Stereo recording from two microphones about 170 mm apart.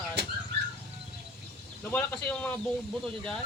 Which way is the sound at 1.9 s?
5° left (ahead or behind).